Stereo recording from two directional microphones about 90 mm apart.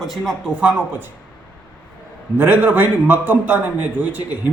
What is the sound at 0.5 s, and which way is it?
Speech, 15° right (ahead or behind).